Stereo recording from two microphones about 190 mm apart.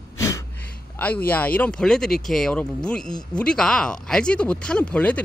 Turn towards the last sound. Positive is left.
turn(degrees=5)  # may be behind; listen again after turning